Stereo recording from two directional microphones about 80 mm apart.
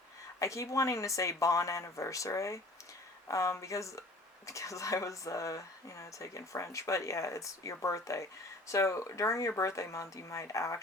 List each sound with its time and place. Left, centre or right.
0.3 s speech: left